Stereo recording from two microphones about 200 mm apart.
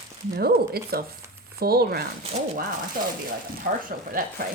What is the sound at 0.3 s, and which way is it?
Speech, 50° right (ahead or behind).